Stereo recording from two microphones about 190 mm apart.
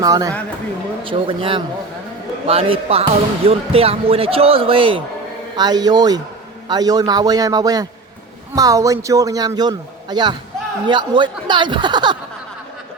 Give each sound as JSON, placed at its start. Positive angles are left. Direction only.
{"t": 0.0, "sound": "a man's voice", "side_deg": -20}